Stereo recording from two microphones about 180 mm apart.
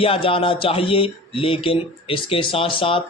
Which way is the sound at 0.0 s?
30° left (ahead or behind).